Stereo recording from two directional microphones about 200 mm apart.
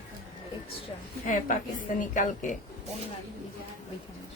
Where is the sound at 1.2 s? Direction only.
40° left (ahead or behind).